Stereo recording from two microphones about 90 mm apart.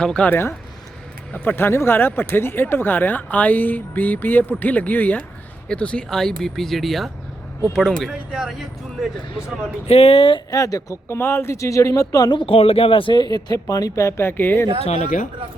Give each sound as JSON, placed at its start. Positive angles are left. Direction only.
{"t": 0.0, "sound": "speech", "side_deg": 10}
{"t": 0.3, "sound": "speech", "side_deg": 25}
{"t": 9.8, "sound": "speech", "side_deg": 85}
{"t": 10.5, "sound": "speech", "side_deg": 40}
{"t": 11.2, "sound": "speech", "side_deg": 25}
{"t": 12.4, "sound": "speech", "side_deg": 90}
{"t": 13.1, "sound": "speech", "side_deg": 45}